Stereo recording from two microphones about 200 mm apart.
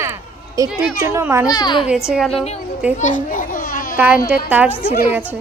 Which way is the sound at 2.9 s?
40° left (ahead or behind).